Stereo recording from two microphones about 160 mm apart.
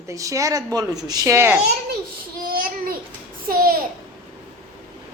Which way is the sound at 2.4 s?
65° right (ahead or behind).